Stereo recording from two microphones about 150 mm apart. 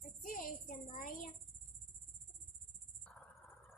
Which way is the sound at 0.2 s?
65° left (ahead or behind).